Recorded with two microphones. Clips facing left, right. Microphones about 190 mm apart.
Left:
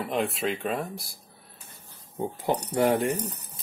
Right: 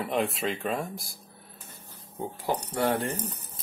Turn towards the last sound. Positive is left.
turn(degrees=15)  # may be behind; listen again after turning